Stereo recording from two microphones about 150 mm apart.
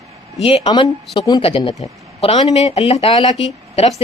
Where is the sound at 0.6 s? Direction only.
30° left (ahead or behind).